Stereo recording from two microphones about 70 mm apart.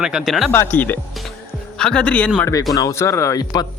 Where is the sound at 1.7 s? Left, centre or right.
Centre.